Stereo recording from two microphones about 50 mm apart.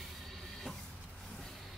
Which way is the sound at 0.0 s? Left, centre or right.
Centre.